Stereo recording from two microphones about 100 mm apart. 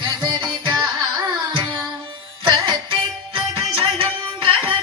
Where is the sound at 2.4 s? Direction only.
50° right (ahead or behind).